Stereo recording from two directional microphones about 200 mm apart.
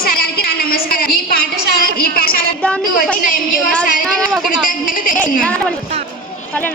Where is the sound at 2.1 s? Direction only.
50° left (ahead or behind).